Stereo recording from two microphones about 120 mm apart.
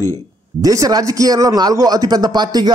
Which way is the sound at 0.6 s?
30° right (ahead or behind).